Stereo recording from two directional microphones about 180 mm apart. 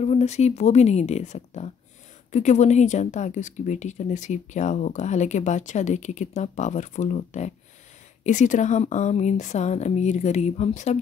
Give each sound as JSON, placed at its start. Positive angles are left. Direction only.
{"t": 0.0, "sound": "a woman's voice", "side_deg": 35}